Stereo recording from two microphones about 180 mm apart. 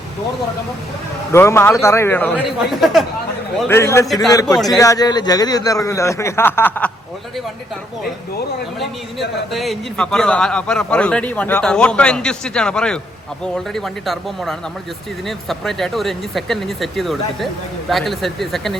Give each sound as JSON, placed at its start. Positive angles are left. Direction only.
{"t": 1.3, "sound": "a man's voice", "side_deg": 15}
{"t": 3.7, "sound": "a man's voice", "side_deg": 15}
{"t": 4.0, "sound": "a man's voice", "side_deg": 0}
{"t": 4.3, "sound": "a man's voice", "side_deg": 20}
{"t": 4.5, "sound": "a man's voice", "side_deg": 0}
{"t": 4.8, "sound": "a man's voice", "side_deg": 20}
{"t": 9.5, "sound": "a man's voice", "side_deg": 0}